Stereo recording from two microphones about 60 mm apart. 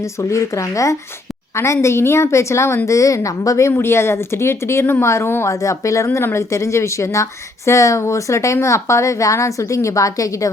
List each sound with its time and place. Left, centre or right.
0.0 s a woman's voice: left
2.9 s a woman's voice: left
3.7 s speech: left
5.5 s a woman's voice: left